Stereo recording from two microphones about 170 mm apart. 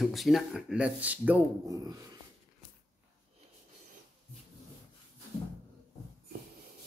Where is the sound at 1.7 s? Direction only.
20° right (ahead or behind).